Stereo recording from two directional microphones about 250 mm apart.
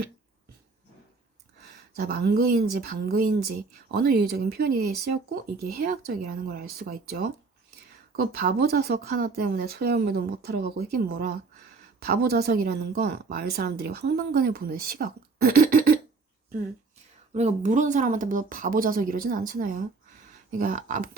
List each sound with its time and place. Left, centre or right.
2.0 s speech: right
17.3 s speech: right